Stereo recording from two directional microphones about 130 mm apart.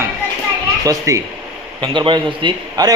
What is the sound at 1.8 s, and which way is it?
A man's voice, 40° right (ahead or behind).